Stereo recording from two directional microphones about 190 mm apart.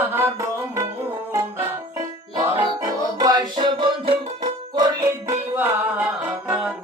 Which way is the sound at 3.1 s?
20° right (ahead or behind).